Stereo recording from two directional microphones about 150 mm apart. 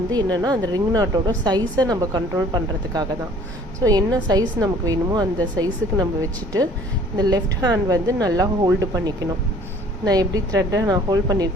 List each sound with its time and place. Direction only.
0.1 s a woman's voice: 25° right (ahead or behind)
7.2 s a woman's voice: 25° right (ahead or behind)